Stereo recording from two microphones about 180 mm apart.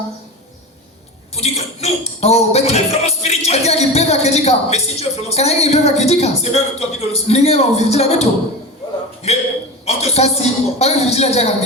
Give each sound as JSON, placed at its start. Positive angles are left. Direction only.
{"t": 1.4, "sound": "speech", "side_deg": 35}